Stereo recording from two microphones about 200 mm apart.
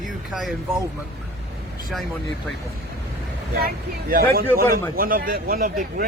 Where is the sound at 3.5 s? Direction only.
45° right (ahead or behind).